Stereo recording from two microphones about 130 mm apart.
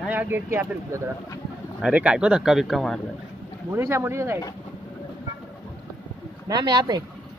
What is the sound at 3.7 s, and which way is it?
Speech, 20° right (ahead or behind).